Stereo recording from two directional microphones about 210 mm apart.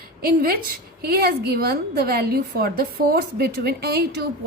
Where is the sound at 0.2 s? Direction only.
45° right (ahead or behind).